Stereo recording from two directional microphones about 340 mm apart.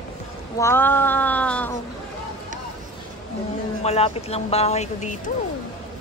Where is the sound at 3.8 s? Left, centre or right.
Centre.